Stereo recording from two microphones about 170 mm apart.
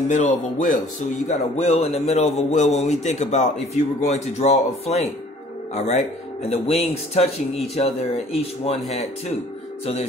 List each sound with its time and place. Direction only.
0.1 s speech: 50° left (ahead or behind)